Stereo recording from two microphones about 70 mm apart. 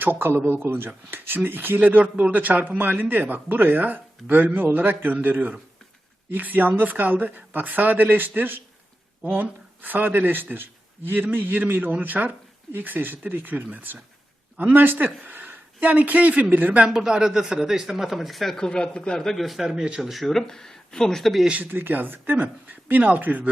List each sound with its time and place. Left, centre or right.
0.0 s speech: right; by 20.0 s centre
20.0 s speech: centre
21.6 s speech: right